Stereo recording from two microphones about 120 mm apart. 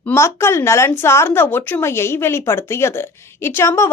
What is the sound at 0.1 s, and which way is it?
A woman's voice, 25° left (ahead or behind).